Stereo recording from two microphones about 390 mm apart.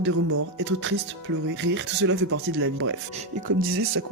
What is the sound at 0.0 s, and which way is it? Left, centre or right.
Speech, right.